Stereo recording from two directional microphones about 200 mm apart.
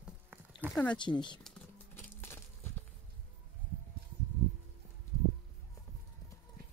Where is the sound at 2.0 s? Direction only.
10° left (ahead or behind).